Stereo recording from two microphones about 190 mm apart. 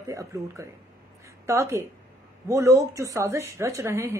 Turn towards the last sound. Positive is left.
turn(degrees=-15)  # may be behind; listen again after turning